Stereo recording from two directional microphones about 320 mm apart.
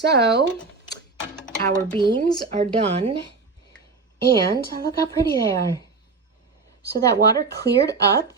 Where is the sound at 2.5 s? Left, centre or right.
Right.